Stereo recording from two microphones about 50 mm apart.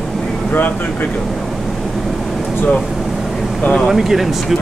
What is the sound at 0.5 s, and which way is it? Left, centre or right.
Speech, left.